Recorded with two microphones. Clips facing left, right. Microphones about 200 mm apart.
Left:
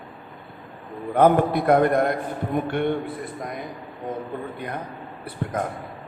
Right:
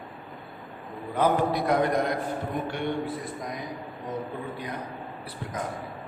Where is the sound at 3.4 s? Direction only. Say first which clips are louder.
Left 3 dB; 55° left (ahead or behind).